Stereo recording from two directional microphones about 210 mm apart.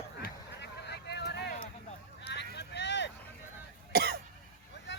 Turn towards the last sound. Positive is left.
turn(degrees=-50)  # may be behind; listen again after turning